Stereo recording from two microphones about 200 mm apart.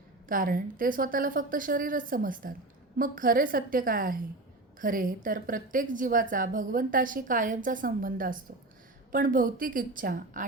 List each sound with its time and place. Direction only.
0.3 s a woman's voice: 45° right (ahead or behind)